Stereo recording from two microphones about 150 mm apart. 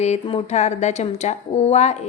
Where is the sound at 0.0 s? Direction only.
40° left (ahead or behind).